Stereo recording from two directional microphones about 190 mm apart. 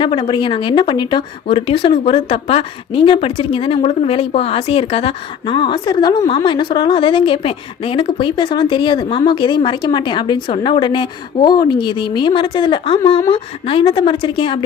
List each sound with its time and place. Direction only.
0.0 s speech: 25° left (ahead or behind)